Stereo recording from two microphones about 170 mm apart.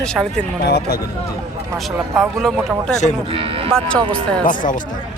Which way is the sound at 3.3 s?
35° right (ahead or behind).